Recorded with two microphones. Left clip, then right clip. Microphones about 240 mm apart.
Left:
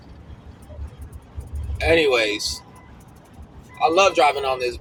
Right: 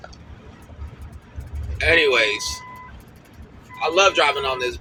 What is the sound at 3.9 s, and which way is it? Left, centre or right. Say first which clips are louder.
Speech: right 1 dB; left.